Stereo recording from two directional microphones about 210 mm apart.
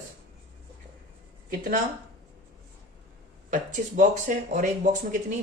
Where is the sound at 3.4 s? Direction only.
35° right (ahead or behind).